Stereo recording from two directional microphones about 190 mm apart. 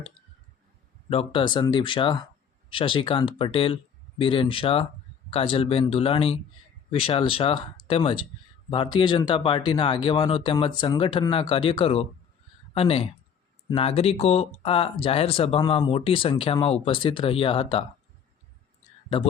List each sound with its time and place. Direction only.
1.1 s speech: 30° left (ahead or behind)